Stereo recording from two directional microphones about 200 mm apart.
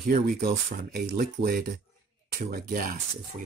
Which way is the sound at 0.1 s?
50° right (ahead or behind).